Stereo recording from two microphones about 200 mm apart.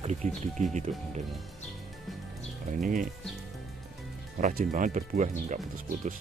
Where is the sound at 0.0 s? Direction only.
35° right (ahead or behind).